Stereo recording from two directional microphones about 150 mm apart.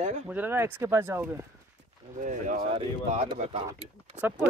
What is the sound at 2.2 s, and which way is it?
Speech, 55° right (ahead or behind).